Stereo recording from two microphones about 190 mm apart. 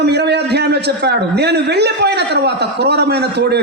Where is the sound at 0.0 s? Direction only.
60° right (ahead or behind).